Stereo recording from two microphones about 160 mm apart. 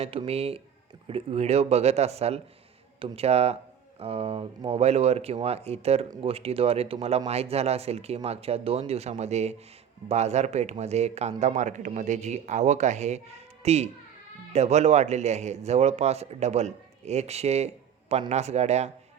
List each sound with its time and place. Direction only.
0.0 s a man's voice: 35° right (ahead or behind)